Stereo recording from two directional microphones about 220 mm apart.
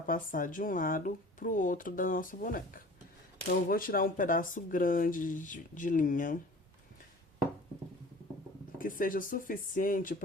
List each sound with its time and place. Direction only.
0.1 s speech: 40° left (ahead or behind)
8.8 s speech: 40° left (ahead or behind)